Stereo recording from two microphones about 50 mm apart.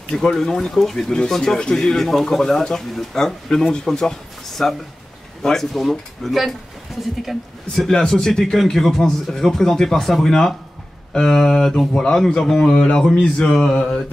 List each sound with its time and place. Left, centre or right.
0.1 s speech: centre
7.7 s speech: centre